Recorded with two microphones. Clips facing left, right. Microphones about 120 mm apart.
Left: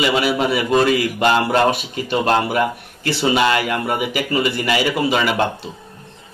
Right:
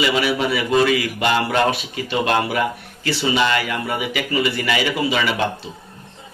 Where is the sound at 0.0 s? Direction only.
45° left (ahead or behind).